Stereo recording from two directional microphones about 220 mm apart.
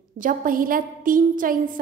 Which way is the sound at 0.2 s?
40° right (ahead or behind).